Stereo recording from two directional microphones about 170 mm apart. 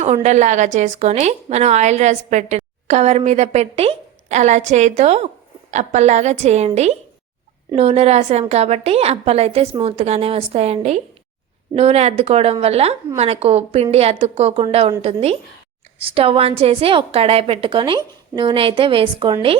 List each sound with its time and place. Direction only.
0.0 s a woman's voice: 40° right (ahead or behind)